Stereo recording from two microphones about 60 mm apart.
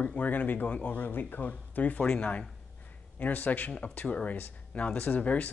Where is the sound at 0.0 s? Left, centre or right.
Left.